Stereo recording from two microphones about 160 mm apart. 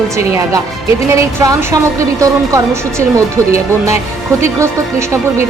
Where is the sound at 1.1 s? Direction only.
20° right (ahead or behind).